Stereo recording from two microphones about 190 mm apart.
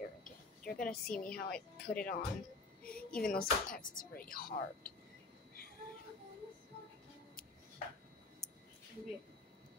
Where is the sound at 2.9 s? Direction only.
50° left (ahead or behind).